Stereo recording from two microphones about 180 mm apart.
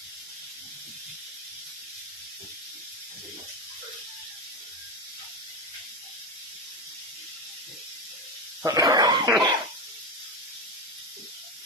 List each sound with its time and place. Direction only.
8.6 s dog: 20° right (ahead or behind)